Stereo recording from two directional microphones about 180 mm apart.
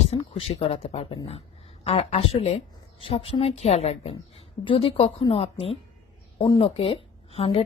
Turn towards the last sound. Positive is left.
turn(degrees=30)  # may be behind; listen again after turning